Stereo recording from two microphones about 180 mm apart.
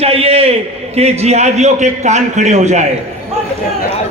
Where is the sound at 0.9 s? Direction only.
35° right (ahead or behind).